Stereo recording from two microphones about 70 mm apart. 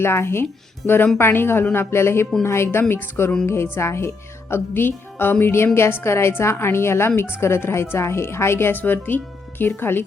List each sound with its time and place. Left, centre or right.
0.0 s speech: left